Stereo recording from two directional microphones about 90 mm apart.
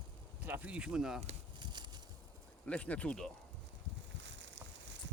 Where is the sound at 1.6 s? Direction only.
55° right (ahead or behind).